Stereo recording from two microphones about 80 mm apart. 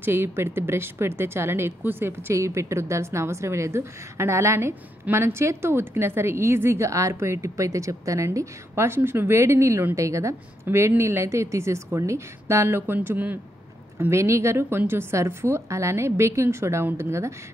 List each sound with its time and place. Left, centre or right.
0.0 s a woman's voice: right